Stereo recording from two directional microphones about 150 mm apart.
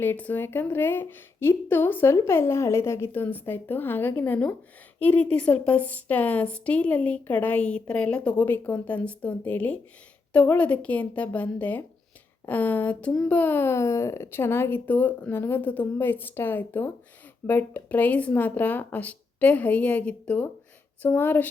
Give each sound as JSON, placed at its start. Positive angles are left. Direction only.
{"t": 0.0, "sound": "a woman's voice", "side_deg": 10}